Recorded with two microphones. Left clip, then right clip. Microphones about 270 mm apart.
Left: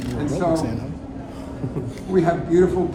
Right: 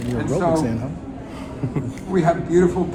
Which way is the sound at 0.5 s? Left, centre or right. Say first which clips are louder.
Right 2 dB; centre.